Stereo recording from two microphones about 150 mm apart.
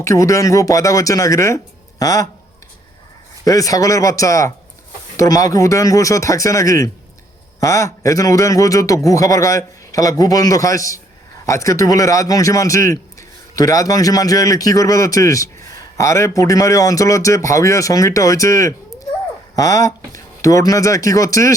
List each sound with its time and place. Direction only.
0.0 s a man's voice: 20° left (ahead or behind)
3.4 s a man's voice: 25° left (ahead or behind)